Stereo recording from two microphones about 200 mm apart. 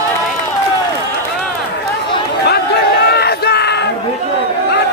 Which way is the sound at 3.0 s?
55° left (ahead or behind).